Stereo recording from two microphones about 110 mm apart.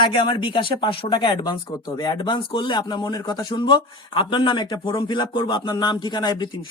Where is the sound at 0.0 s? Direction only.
45° left (ahead or behind).